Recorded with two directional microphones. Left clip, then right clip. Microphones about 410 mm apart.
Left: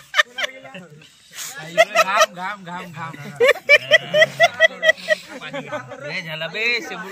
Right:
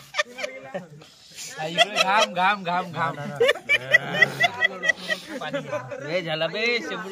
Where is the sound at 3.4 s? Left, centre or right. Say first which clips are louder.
Left 7 dB; centre.